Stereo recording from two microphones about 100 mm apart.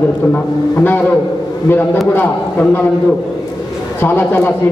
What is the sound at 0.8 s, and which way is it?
Speech, 20° left (ahead or behind).